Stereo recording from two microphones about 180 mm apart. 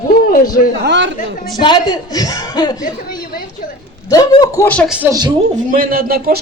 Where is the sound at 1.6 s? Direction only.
25° left (ahead or behind).